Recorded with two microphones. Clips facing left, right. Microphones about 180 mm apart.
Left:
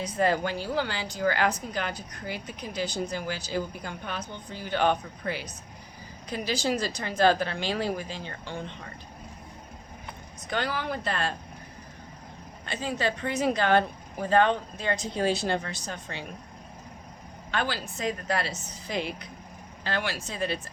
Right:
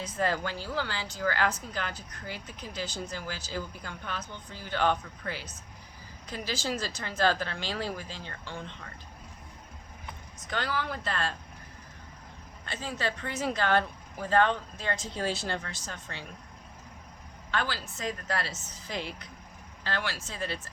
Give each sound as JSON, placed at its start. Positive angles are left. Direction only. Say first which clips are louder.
{"t": 0.0, "sound": "speech", "louder": "left 5 dB", "side_deg": 15}
{"t": 10.4, "sound": "speech", "louder": "left 3 dB", "side_deg": 15}
{"t": 12.6, "sound": "speech", "louder": "left 4 dB", "side_deg": 15}
{"t": 17.5, "sound": "speech", "louder": "left 3 dB", "side_deg": 15}